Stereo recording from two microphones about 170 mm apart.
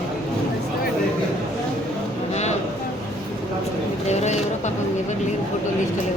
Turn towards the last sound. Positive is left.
turn(degrees=40)  # may be behind; listen again after turning